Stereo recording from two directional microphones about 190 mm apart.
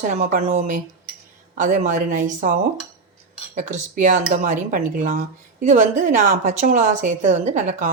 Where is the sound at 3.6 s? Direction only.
40° right (ahead or behind).